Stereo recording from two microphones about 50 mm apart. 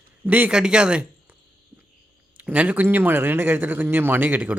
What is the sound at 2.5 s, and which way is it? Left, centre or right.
Speech, right.